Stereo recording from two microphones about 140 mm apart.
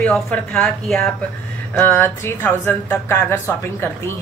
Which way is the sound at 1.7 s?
15° left (ahead or behind).